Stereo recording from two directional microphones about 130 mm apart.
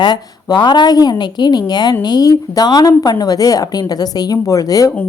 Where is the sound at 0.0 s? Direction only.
30° left (ahead or behind).